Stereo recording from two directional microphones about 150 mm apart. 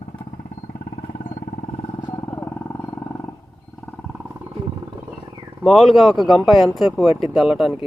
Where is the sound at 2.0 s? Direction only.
25° left (ahead or behind).